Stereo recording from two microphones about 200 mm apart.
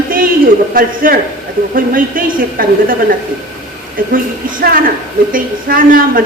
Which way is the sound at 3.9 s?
45° right (ahead or behind).